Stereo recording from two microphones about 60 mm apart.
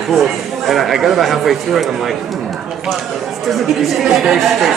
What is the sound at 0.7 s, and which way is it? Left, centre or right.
Speech, centre.